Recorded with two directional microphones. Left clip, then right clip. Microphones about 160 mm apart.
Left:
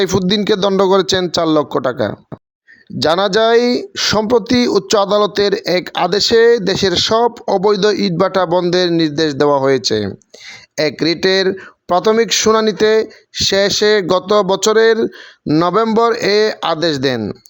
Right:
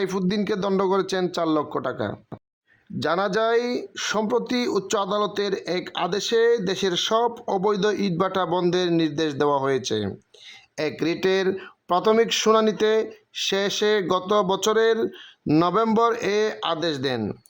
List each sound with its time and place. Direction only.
0.0 s speech: 35° left (ahead or behind)